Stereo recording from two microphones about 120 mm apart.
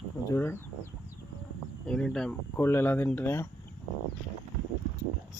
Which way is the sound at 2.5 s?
20° left (ahead or behind).